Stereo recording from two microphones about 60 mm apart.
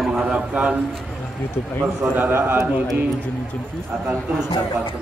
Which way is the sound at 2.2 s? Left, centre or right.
Right.